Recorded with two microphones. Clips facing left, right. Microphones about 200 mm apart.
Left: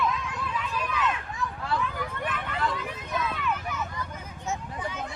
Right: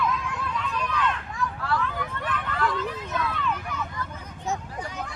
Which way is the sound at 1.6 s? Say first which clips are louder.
Even; 20° left (ahead or behind).